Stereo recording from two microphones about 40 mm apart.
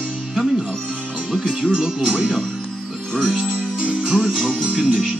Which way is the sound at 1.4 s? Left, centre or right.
Centre.